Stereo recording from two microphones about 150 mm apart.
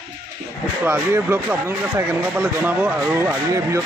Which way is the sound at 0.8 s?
15° right (ahead or behind).